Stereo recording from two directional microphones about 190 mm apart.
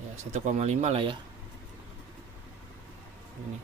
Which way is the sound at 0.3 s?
35° right (ahead or behind).